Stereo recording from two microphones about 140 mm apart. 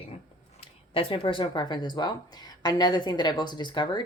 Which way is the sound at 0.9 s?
40° left (ahead or behind).